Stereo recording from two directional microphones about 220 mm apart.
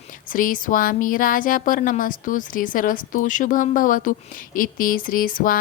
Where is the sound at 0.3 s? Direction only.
40° left (ahead or behind).